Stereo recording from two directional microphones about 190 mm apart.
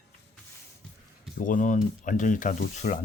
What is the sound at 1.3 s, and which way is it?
Speech, 45° left (ahead or behind).